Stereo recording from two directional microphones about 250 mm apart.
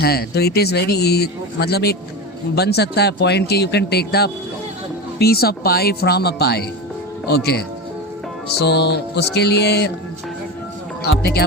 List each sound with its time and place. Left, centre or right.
0.0 s speech: left
11.2 s speech: left